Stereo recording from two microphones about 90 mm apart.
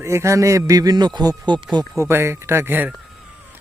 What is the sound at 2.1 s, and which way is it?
Speech, 30° right (ahead or behind).